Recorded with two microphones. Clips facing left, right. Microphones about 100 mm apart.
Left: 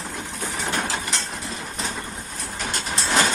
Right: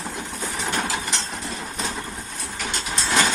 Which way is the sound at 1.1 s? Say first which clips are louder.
Right 1 dB; centre (ahead or behind).